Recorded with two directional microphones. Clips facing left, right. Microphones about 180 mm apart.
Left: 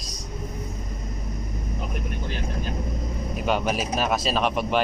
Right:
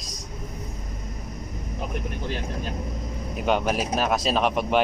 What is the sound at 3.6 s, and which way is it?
Speech, 5° left (ahead or behind).